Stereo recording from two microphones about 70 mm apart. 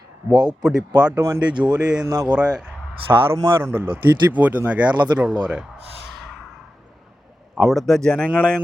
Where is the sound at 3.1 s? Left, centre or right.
Right.